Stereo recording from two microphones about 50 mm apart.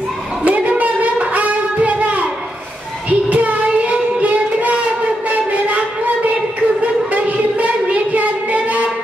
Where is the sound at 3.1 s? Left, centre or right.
Right.